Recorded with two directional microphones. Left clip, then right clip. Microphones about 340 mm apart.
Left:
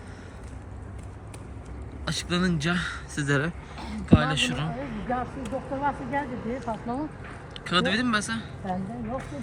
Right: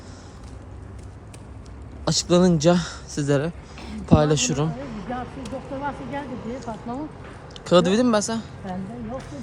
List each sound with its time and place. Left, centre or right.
2.0 s speech: centre
5.2 s speech: centre
7.6 s speech: centre
8.6 s speech: centre